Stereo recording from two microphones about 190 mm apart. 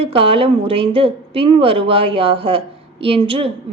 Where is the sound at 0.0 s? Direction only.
30° right (ahead or behind).